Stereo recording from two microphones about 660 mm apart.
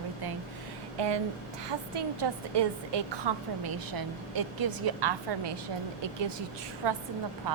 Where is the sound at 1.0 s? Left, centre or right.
Right.